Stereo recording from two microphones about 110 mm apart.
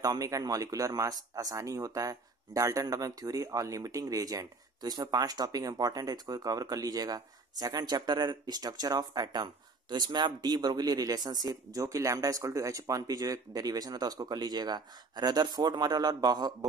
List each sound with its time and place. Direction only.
0.0 s speech: 35° right (ahead or behind)